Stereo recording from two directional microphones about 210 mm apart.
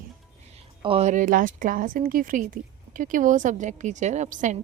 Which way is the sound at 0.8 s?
25° right (ahead or behind).